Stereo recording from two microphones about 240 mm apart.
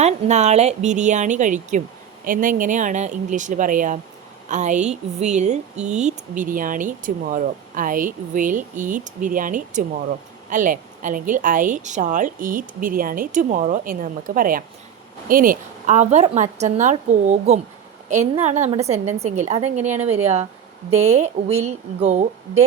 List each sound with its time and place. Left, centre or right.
0.0 s a woman's voice: right